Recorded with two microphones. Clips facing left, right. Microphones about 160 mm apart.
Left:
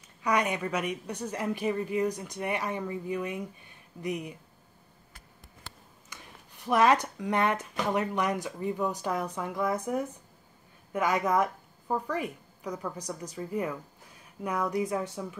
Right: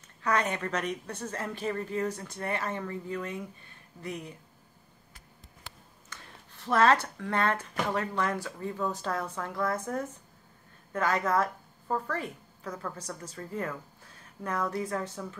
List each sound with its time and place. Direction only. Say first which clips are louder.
0.2 s speech: left 1 dB; 15° left (ahead or behind)
6.0 s a woman's voice: even; 15° left (ahead or behind)